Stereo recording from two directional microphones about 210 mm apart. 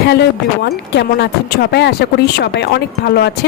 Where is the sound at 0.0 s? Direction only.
50° left (ahead or behind).